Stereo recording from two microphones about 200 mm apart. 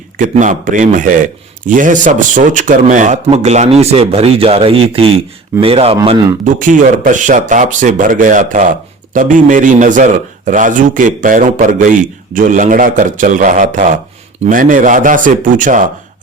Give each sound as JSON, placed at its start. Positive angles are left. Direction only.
{"t": 0.2, "sound": "a man's voice", "side_deg": -40}
{"t": 6.4, "sound": "a man's voice", "side_deg": -40}